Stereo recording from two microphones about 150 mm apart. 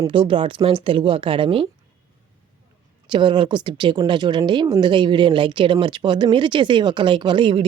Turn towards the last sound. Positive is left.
turn(degrees=-35)  # may be behind; listen again after turning